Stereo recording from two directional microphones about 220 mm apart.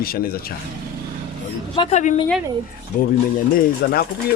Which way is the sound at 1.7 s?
25° left (ahead or behind).